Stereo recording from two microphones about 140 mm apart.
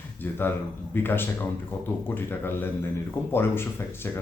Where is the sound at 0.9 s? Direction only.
15° left (ahead or behind).